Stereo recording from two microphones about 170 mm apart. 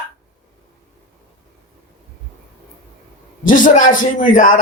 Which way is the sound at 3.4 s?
50° left (ahead or behind).